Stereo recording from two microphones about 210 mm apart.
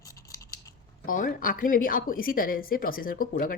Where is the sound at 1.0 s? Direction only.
40° left (ahead or behind).